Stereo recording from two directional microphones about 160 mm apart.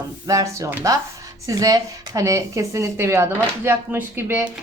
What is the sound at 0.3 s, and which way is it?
A woman's voice, 20° right (ahead or behind).